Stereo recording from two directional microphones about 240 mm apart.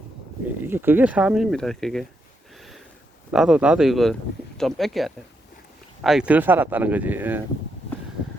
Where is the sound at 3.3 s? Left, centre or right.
Centre.